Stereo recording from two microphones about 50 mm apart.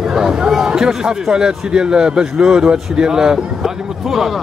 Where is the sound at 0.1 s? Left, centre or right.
Centre.